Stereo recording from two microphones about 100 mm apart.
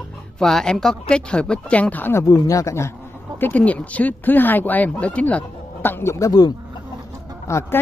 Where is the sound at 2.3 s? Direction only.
35° left (ahead or behind).